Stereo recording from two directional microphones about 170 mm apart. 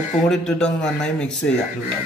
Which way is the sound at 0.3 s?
5° left (ahead or behind).